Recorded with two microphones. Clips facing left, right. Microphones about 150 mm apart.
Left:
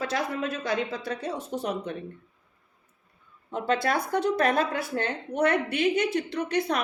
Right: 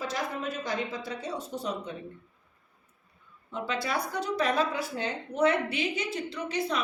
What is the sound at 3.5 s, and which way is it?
Speech, 50° left (ahead or behind).